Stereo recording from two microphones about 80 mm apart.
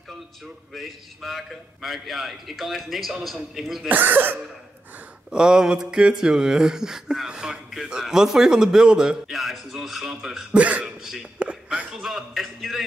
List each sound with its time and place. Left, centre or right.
0.7 s a man's voice: centre
3.9 s speech: right
5.3 s a sound: centre
10.6 s a sound: centre
11.0 s speech: centre
11.3 s a man's voice: centre